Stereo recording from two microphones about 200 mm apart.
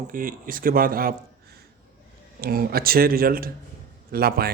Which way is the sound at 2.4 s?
50° right (ahead or behind).